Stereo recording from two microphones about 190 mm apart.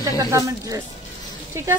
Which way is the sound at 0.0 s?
15° right (ahead or behind).